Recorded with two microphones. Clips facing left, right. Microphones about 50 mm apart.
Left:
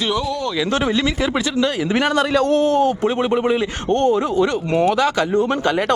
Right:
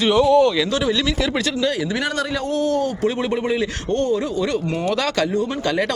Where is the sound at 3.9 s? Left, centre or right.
Left.